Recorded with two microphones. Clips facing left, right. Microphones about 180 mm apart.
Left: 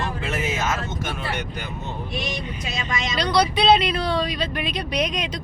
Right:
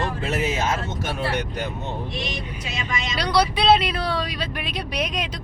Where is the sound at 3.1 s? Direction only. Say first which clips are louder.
Left 1 dB; 10° right (ahead or behind).